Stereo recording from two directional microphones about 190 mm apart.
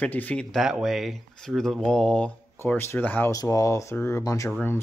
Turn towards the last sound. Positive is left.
turn(degrees=10)  # may be behind; listen again after turning